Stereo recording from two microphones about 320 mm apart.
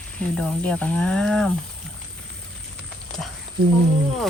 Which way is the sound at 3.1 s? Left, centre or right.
Centre.